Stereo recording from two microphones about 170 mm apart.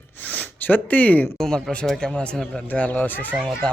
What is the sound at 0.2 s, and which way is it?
Speech, 10° left (ahead or behind).